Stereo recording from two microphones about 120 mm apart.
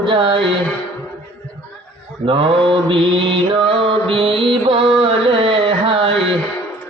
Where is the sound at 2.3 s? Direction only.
45° right (ahead or behind).